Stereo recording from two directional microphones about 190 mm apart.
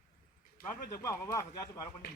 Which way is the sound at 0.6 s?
15° left (ahead or behind).